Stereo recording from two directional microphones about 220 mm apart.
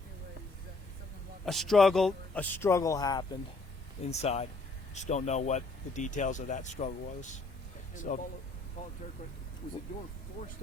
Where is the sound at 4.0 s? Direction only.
30° left (ahead or behind).